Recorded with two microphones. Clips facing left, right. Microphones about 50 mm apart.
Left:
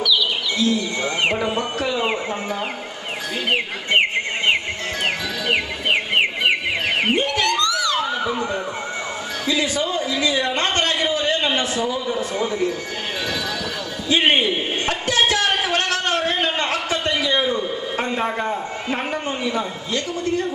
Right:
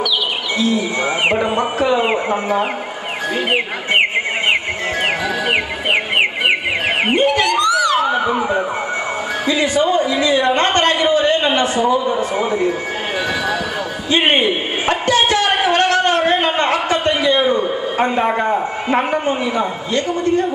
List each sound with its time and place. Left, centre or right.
0.6 s speech: centre
5.5 s music: right
7.2 s a sound: right
7.4 s emergency vehicle: centre
9.6 s speech: right
10.8 s a sound: right
12.2 s speech: centre
14.3 s a sound: right
19.2 s speech: centre